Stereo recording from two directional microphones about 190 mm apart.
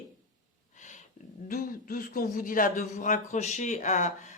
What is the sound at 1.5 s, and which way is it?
Speech, 50° left (ahead or behind).